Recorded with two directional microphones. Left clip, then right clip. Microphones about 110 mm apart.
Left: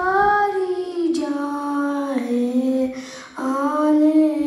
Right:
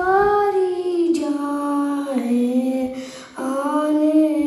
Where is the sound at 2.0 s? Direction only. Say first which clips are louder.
Right 1 dB; 15° right (ahead or behind).